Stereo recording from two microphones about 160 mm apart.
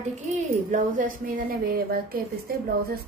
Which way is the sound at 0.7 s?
55° right (ahead or behind).